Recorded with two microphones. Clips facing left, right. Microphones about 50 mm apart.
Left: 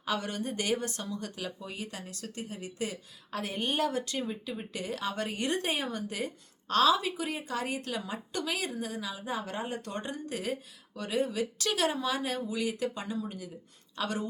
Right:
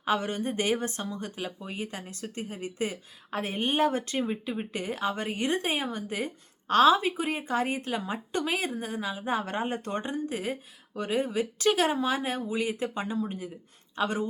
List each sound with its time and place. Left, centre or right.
0.0 s speech: right